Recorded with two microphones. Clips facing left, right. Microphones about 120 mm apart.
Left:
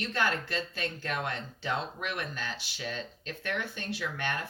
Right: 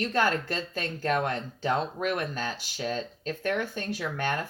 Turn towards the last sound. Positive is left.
turn(degrees=-40)  # may be behind; listen again after turning